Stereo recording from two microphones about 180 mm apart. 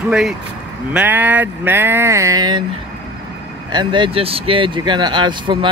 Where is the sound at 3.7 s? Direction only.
25° right (ahead or behind).